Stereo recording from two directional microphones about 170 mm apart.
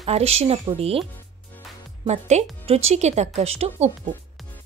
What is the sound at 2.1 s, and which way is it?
A woman's voice, 40° right (ahead or behind).